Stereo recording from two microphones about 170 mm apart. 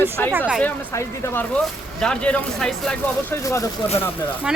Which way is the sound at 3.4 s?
20° left (ahead or behind).